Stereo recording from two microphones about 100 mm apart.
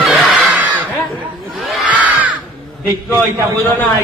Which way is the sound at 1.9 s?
15° right (ahead or behind).